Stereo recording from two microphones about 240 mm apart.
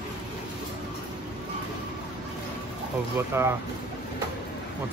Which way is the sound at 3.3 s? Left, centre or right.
Centre.